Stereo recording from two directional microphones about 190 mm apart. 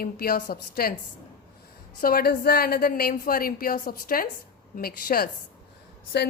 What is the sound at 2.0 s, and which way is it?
A woman's voice, 50° left (ahead or behind).